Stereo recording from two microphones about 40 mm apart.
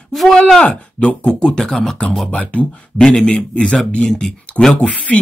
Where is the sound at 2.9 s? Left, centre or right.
Centre.